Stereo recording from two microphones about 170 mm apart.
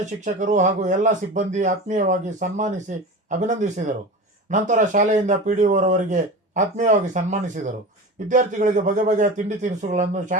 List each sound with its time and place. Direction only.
0.0 s speech: 45° right (ahead or behind)